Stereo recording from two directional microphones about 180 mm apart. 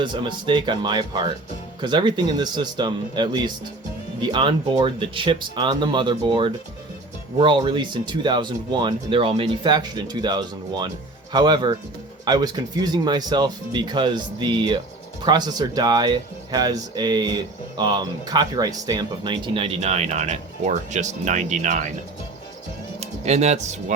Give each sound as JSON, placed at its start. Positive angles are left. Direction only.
{"t": 0.0, "sound": "speech", "side_deg": -25}
{"t": 23.0, "sound": "music", "side_deg": -40}